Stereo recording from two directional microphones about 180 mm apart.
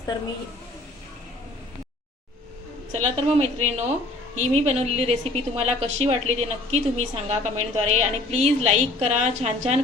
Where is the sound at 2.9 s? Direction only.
35° right (ahead or behind).